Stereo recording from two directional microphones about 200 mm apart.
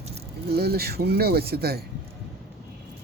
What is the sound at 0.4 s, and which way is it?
Speech, 55° right (ahead or behind).